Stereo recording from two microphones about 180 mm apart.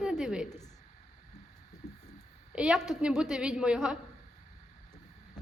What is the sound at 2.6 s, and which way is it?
A woman's voice, centre (ahead or behind).